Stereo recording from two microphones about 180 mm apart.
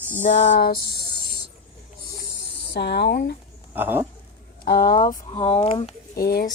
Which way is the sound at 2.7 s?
65° left (ahead or behind).